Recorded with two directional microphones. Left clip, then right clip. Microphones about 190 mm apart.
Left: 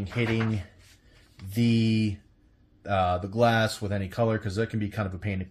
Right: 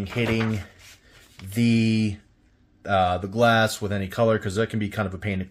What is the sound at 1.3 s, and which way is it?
Speech, 35° right (ahead or behind).